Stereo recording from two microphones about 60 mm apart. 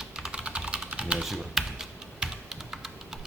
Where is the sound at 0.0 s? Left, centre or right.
Centre.